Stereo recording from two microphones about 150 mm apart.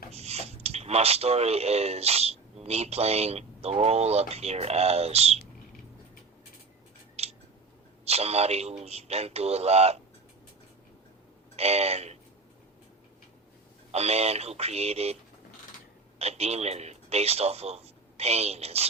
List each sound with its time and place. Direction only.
0.1 s speech: 45° right (ahead or behind)
7.2 s scissors: 45° right (ahead or behind)
8.0 s a man's voice: 45° right (ahead or behind)
11.5 s a man's voice: 45° right (ahead or behind)
13.9 s a man's voice: 45° right (ahead or behind)